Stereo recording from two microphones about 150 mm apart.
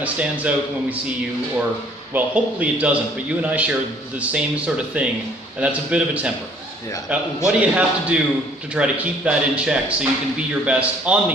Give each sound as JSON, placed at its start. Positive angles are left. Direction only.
{"t": 0.0, "sound": "speech", "side_deg": -10}
{"t": 2.1, "sound": "speech", "side_deg": -10}